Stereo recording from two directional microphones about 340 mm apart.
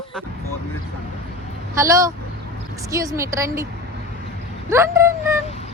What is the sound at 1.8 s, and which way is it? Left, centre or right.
Speech, centre.